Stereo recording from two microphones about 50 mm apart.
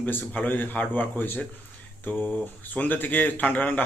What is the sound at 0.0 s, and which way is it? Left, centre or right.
Speech, left.